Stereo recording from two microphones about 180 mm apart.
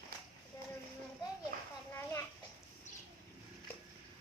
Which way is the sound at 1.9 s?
15° left (ahead or behind).